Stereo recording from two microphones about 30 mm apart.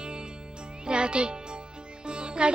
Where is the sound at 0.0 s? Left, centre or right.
Right.